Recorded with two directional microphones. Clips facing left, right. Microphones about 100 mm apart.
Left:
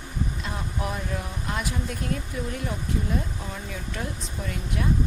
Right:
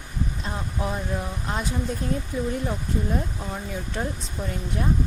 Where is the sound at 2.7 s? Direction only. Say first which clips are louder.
Right 2 dB; 35° right (ahead or behind).